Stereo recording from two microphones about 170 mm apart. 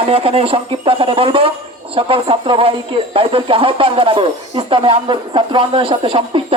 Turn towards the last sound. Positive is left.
turn(degrees=-30)  # may be behind; listen again after turning